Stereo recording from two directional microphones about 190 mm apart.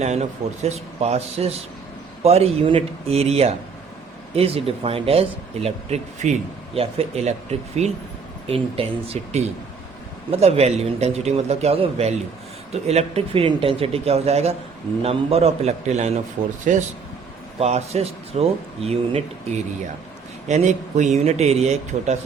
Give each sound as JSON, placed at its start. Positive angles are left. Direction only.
{"t": 0.0, "sound": "speech", "side_deg": -35}
{"t": 10.4, "sound": "speech", "side_deg": -35}
{"t": 17.6, "sound": "speech", "side_deg": -35}
{"t": 20.5, "sound": "speech", "side_deg": -40}